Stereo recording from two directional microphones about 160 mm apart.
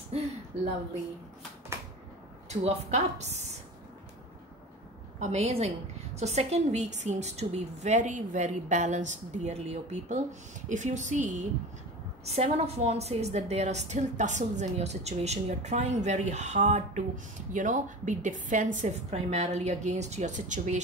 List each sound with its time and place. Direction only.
2.6 s a woman's voice: 45° right (ahead or behind)
5.2 s a woman's voice: 40° right (ahead or behind)